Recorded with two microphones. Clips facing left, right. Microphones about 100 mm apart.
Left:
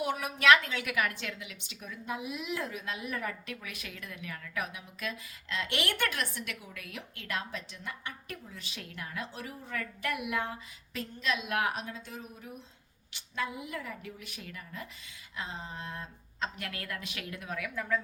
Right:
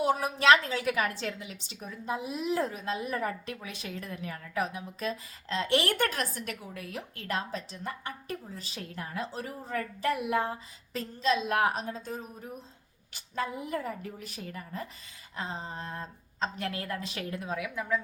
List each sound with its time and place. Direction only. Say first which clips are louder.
0.0 s a woman's voice: right 3 dB; 35° right (ahead or behind)